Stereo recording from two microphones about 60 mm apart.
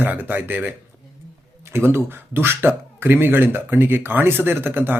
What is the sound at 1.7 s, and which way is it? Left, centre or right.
Speech, right.